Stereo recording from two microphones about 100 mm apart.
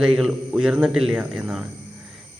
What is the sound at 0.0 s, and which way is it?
A man's voice, 5° right (ahead or behind).